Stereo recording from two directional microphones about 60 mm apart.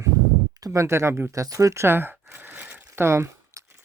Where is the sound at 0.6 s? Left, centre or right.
Right.